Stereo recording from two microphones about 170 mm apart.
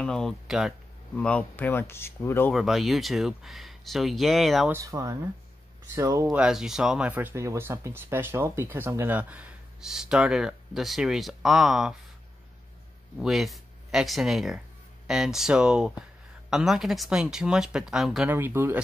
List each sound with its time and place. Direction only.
0.0 s speech: 5° left (ahead or behind)
1.1 s speech: 10° left (ahead or behind)
2.5 s speech: centre (ahead or behind)
4.6 s speech: 20° right (ahead or behind)
6.2 s speech: 5° right (ahead or behind)
13.2 s speech: centre (ahead or behind)
18.3 s speech: 10° right (ahead or behind)